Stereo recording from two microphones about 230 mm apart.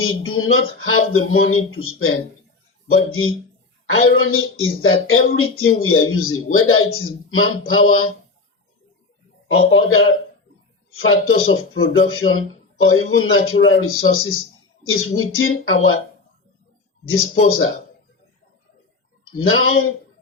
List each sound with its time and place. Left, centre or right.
0.0 s speech: left
9.5 s speech: left
11.0 s speech: left
17.1 s speech: left
19.2 s speech: left